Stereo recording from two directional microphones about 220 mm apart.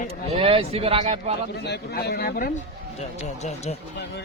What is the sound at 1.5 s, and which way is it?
A man's voice, 50° left (ahead or behind).